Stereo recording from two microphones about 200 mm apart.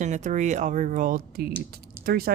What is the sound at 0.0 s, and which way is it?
Speech, 35° right (ahead or behind).